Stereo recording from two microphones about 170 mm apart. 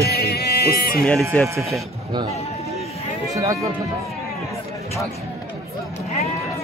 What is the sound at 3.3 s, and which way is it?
Speech, 20° right (ahead or behind).